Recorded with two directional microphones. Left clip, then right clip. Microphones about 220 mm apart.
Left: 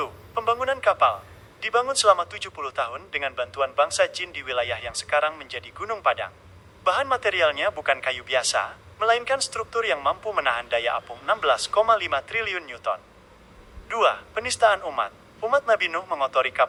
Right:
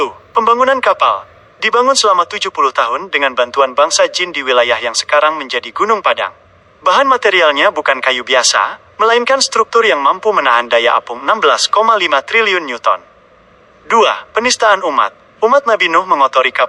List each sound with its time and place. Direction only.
0.0 s speech: 55° right (ahead or behind)